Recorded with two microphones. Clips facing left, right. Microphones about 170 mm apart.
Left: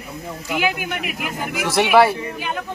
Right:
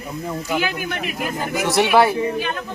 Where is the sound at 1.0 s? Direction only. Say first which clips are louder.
Right 2 dB; 30° right (ahead or behind).